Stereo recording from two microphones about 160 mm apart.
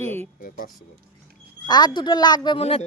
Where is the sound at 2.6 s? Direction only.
40° left (ahead or behind).